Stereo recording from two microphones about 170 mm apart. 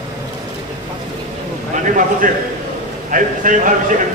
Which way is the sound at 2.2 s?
55° right (ahead or behind).